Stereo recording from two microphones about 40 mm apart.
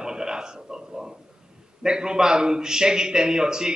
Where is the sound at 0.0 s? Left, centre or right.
Centre.